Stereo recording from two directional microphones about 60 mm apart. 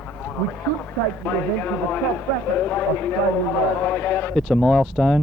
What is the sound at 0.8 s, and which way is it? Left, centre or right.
Speech, left.